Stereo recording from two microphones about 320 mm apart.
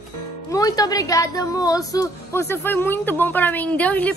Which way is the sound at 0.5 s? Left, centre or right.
Centre.